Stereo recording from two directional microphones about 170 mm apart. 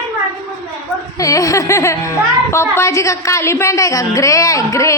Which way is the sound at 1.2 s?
20° left (ahead or behind).